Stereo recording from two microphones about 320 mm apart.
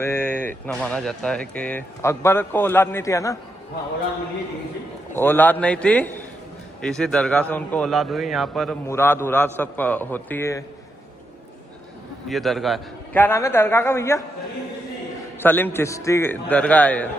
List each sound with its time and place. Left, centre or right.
0.0 s speech: centre
5.1 s a man's voice: centre
12.3 s speech: centre
15.4 s a man's voice: centre